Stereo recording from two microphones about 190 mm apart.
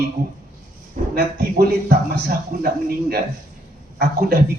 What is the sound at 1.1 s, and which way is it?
A man's voice, 55° right (ahead or behind).